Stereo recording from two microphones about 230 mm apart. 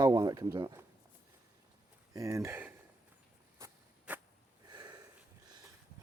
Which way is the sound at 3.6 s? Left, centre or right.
Centre.